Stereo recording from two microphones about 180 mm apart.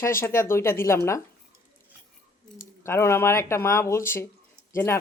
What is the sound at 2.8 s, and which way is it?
Speech, 15° left (ahead or behind).